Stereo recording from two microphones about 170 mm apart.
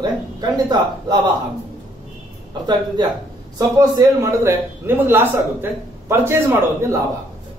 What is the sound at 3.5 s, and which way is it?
A man's voice, 20° right (ahead or behind).